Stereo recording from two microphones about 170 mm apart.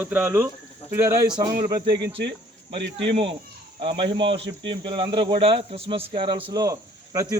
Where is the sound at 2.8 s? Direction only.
90° right.